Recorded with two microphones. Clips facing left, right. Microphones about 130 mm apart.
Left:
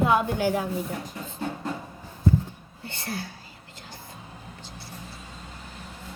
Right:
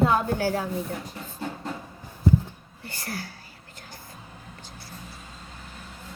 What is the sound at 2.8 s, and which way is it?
Speech, 25° left (ahead or behind).